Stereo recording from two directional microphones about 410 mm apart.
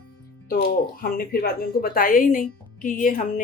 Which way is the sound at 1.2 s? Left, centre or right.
Left.